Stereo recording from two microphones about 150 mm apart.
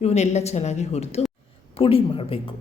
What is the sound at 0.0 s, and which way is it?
Speech, 45° left (ahead or behind).